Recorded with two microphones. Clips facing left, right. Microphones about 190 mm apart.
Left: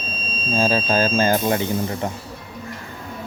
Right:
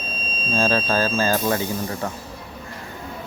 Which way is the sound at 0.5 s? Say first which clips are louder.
Left 1 dB; 10° left (ahead or behind).